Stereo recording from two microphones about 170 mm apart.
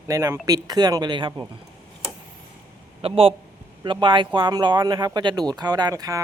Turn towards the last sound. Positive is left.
turn(degrees=-20)  # may be behind; listen again after turning